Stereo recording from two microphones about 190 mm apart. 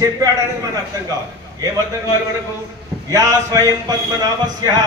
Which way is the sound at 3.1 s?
15° right (ahead or behind).